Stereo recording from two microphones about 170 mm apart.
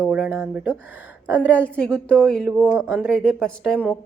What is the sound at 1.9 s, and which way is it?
Speech, 5° left (ahead or behind).